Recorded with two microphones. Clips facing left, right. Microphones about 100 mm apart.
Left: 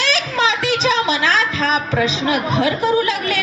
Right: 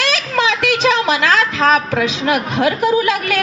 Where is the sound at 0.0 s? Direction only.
55° right (ahead or behind).